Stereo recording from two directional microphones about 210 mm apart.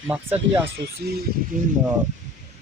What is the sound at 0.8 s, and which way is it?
Speech, 50° right (ahead or behind).